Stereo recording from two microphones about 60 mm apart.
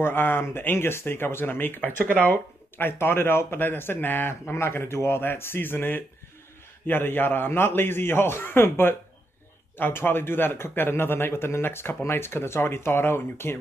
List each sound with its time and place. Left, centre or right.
0.0 s speech: left
2.8 s speech: left